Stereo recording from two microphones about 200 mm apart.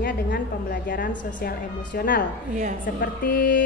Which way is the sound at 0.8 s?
45° left (ahead or behind).